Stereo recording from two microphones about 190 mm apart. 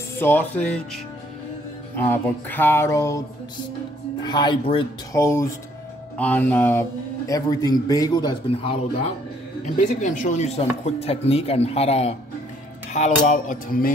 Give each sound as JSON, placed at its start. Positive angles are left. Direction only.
{"t": 0.2, "sound": "a man's voice", "side_deg": 10}
{"t": 2.0, "sound": "a man's voice", "side_deg": 10}
{"t": 4.2, "sound": "speech", "side_deg": 20}
{"t": 5.2, "sound": "a man's voice", "side_deg": 15}
{"t": 9.8, "sound": "chopping", "side_deg": 40}
{"t": 12.9, "sound": "cutlery", "side_deg": 40}